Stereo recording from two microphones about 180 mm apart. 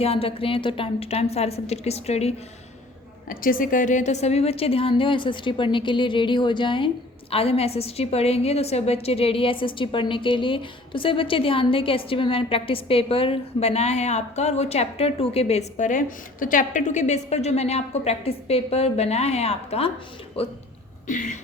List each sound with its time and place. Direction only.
0.0 s a woman's voice: 30° left (ahead or behind)
3.2 s a woman's voice: 50° left (ahead or behind); by 20.5 s 30° left (ahead or behind)
21.1 s a sound: 45° left (ahead or behind)